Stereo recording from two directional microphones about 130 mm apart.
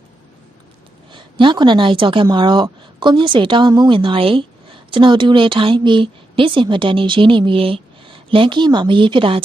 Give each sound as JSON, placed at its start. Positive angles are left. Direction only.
{"t": 1.1, "sound": "a woman's voice", "side_deg": -35}